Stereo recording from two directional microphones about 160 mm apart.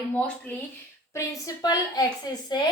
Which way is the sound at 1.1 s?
20° left (ahead or behind).